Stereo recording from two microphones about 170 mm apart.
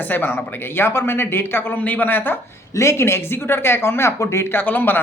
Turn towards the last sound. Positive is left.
turn(degrees=10)  # may be behind; listen again after turning